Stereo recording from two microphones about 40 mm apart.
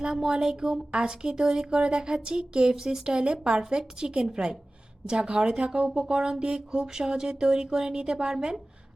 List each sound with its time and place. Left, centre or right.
0.3 s speech: centre